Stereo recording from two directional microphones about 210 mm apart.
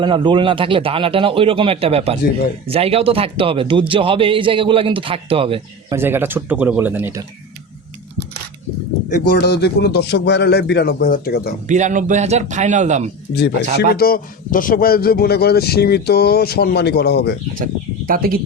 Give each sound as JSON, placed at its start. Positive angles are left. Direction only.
{"t": 0.0, "sound": "speech", "side_deg": -20}
{"t": 6.0, "sound": "speech", "side_deg": -10}
{"t": 9.1, "sound": "a man's voice", "side_deg": 50}
{"t": 11.7, "sound": "a man's voice", "side_deg": -35}
{"t": 13.7, "sound": "a man's voice", "side_deg": 45}
{"t": 17.6, "sound": "speech", "side_deg": -40}